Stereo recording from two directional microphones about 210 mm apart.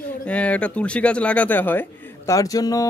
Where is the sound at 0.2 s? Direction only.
5° left (ahead or behind).